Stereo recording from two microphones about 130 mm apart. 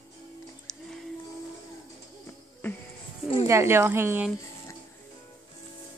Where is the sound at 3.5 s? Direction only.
20° right (ahead or behind).